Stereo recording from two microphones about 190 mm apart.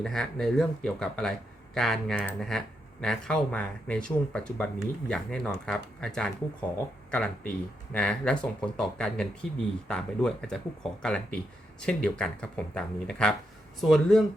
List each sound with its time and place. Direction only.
0.0 s speech: centre (ahead or behind)